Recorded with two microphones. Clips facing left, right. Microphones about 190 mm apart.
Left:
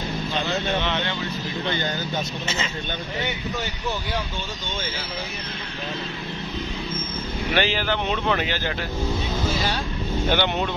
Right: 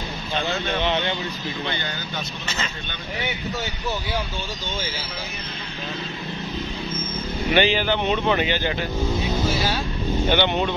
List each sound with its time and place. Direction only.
0.8 s speech: 15° right (ahead or behind)
7.5 s speech: centre (ahead or behind)
10.2 s speech: 5° left (ahead or behind)